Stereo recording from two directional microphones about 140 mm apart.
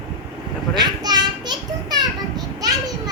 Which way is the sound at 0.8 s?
30° right (ahead or behind).